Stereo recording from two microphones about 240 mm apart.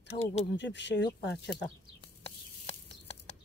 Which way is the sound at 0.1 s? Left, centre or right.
Left.